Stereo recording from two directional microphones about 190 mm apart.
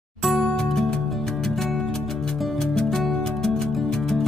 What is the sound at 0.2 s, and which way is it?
Music, centre (ahead or behind).